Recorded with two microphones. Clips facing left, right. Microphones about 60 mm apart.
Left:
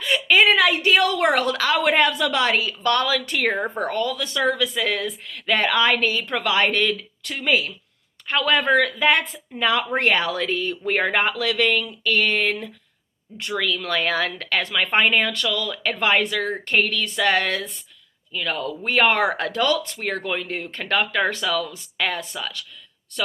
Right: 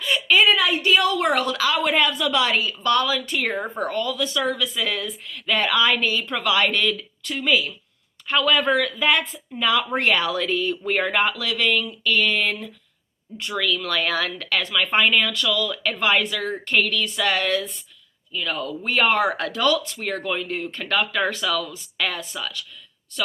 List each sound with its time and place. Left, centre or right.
0.0 s a sound: left
0.6 s a woman's voice: left
13.5 s a woman's voice: left
19.4 s a woman's voice: left